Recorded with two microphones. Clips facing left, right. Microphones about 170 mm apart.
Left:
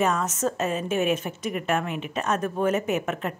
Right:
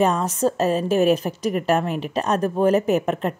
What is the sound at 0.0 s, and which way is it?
A woman's voice, 35° right (ahead or behind).